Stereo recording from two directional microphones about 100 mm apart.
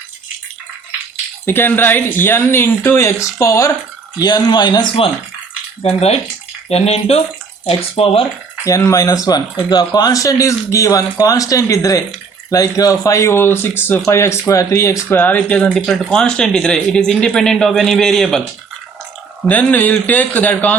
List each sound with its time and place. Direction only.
1.5 s speech: 20° left (ahead or behind)
4.2 s speech: 45° left (ahead or behind)
5.8 s speech: 90° left
7.6 s speech: 65° left (ahead or behind)
8.6 s speech: 30° left (ahead or behind); by 18.4 s 5° left (ahead or behind)
19.5 s speech: 15° left (ahead or behind)